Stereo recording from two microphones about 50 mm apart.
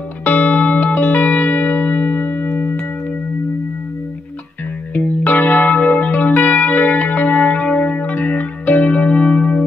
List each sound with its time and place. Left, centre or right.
0.2 s music: left
4.9 s music: left